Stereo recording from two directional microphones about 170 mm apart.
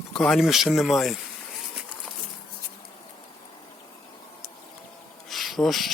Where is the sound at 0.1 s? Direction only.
Centre (ahead or behind).